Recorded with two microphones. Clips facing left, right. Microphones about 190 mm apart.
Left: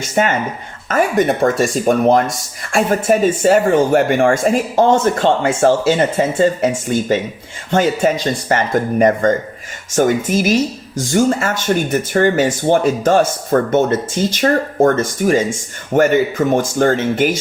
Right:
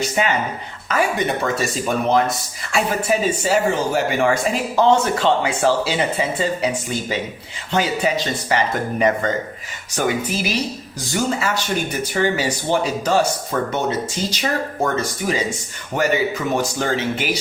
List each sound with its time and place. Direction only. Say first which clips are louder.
0.0 s speech: left 3 dB; 45° left (ahead or behind)